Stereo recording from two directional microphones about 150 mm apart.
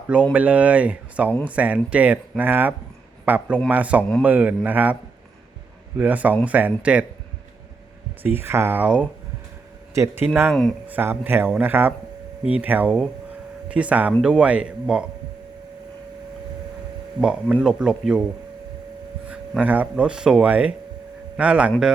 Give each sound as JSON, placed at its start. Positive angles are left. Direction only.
{"t": 0.3, "sound": "speech", "side_deg": -10}
{"t": 6.0, "sound": "speech", "side_deg": -10}
{"t": 8.2, "sound": "speech", "side_deg": -15}
{"t": 10.5, "sound": "speech", "side_deg": 5}
{"t": 10.8, "sound": "speech", "side_deg": -10}
{"t": 17.2, "sound": "speech", "side_deg": -5}
{"t": 19.3, "sound": "speech", "side_deg": -10}